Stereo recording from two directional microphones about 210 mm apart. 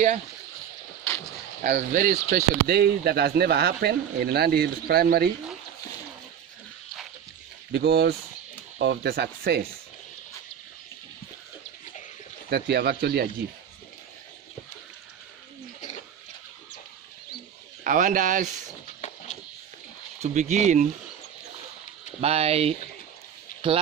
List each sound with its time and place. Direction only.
1.6 s speech: 35° right (ahead or behind)
7.7 s speech: 50° right (ahead or behind)
12.4 s speech: 50° right (ahead or behind)
17.8 s speech: 40° right (ahead or behind)
18.9 s a sound: 35° left (ahead or behind)
20.2 s speech: 35° right (ahead or behind)
22.2 s speech: 30° right (ahead or behind)